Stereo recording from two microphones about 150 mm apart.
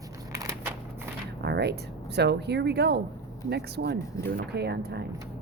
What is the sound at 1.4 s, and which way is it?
Speech, 90° right.